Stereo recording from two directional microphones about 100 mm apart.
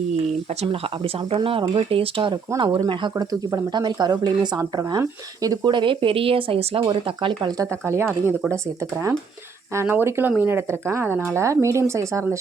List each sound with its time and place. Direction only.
0.6 s speech: 70° right (ahead or behind)
1.5 s speech: 60° right (ahead or behind)
2.6 s speech: 45° right (ahead or behind)
5.7 s speech: 60° right (ahead or behind)
6.8 s speech: 50° right (ahead or behind)
7.6 s speech: 30° right (ahead or behind)
9.7 s speech: 20° right (ahead or behind)